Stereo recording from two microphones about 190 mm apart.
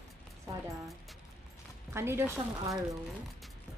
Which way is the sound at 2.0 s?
15° right (ahead or behind).